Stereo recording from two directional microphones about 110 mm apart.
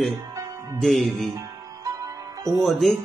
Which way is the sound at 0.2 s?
30° right (ahead or behind).